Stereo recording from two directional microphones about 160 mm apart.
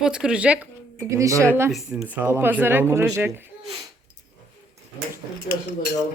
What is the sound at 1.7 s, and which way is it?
Speech, 5° right (ahead or behind).